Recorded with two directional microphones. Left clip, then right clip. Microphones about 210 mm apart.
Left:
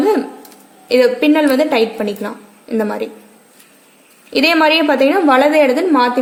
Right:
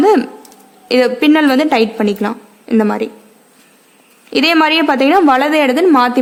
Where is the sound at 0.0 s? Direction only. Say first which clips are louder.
Right 4 dB; 35° right (ahead or behind).